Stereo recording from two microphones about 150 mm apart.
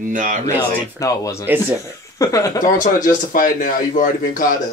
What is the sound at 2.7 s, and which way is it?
Speech, 60° left (ahead or behind).